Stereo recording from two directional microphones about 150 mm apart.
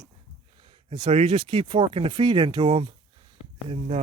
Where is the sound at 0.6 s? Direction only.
35° right (ahead or behind).